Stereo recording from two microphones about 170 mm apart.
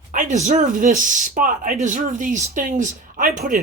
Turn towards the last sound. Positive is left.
turn(degrees=-55)  # may be behind; listen again after turning